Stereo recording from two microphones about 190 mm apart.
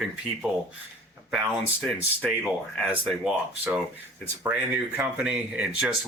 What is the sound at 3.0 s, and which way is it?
Speech, 5° right (ahead or behind).